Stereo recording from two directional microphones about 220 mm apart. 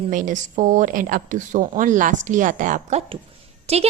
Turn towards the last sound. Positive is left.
turn(degrees=-30)  # may be behind; listen again after turning